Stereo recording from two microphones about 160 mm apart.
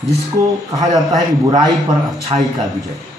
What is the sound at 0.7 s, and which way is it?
Speech, 25° right (ahead or behind).